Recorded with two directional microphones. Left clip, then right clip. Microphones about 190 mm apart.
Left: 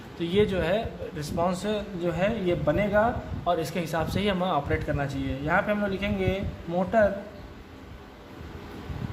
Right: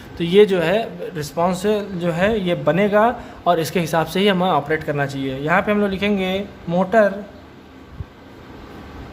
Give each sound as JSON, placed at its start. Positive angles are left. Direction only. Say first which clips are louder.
{"t": 0.2, "sound": "a man's voice", "louder": "right 11 dB", "side_deg": -30}